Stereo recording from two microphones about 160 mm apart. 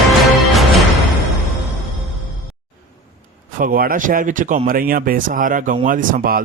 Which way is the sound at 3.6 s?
65° right (ahead or behind).